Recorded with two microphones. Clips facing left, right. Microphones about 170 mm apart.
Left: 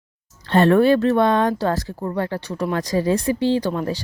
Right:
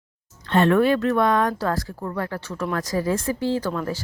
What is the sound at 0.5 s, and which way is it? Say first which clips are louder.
Speech: left 3 dB; 35° left (ahead or behind).